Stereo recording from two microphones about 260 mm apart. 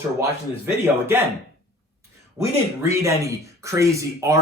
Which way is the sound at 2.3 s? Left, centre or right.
Centre.